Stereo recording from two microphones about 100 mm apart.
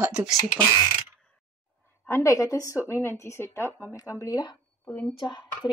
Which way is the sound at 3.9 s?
35° left (ahead or behind).